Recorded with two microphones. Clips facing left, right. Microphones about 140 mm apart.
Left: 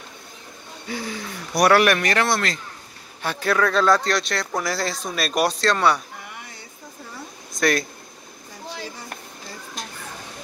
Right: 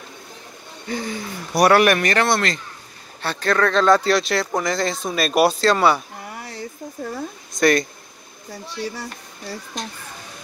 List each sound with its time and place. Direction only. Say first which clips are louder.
0.8 s speech: right 3 dB; 5° left (ahead or behind)
6.2 s a sound: right 8 dB; 40° right (ahead or behind)
7.5 s speech: right 4 dB; centre (ahead or behind)